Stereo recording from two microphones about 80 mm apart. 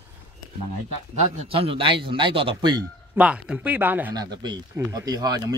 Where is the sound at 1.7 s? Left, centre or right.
Right.